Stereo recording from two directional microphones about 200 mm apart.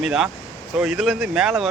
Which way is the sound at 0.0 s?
Centre (ahead or behind).